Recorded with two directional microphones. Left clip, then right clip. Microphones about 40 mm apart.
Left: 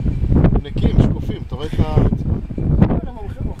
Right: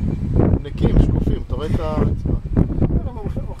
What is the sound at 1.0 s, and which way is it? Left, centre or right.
Speech, left.